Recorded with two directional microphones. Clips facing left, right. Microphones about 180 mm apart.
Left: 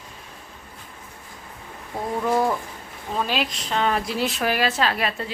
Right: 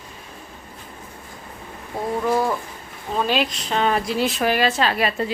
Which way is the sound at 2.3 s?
5° right (ahead or behind).